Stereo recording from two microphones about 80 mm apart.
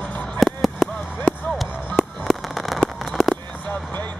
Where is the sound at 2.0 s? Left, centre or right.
Centre.